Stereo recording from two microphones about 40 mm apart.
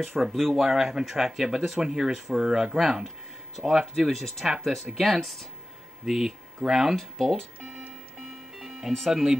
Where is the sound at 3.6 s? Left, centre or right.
Right.